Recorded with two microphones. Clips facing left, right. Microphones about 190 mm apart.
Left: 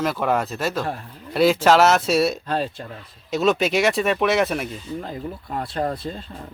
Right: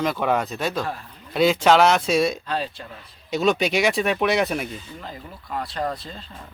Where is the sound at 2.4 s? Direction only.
50° left (ahead or behind).